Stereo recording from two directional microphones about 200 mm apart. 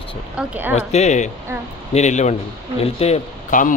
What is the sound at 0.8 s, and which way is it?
Speech, 35° left (ahead or behind).